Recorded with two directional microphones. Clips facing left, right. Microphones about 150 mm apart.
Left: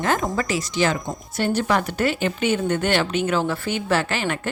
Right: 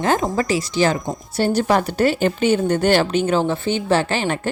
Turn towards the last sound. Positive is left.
turn(degrees=-30)  # may be behind; listen again after turning